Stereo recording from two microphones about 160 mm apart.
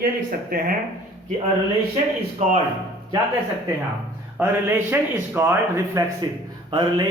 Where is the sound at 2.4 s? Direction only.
45° right (ahead or behind).